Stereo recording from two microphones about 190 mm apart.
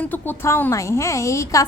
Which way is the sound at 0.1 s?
10° left (ahead or behind).